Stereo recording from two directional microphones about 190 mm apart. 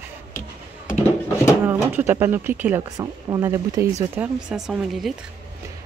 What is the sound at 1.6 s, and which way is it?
Speech, 10° right (ahead or behind).